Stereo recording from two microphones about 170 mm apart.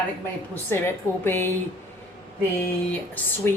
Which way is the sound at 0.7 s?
15° left (ahead or behind).